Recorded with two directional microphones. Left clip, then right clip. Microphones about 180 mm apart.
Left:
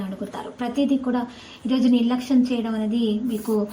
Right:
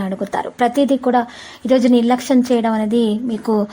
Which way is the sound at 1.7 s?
60° right (ahead or behind).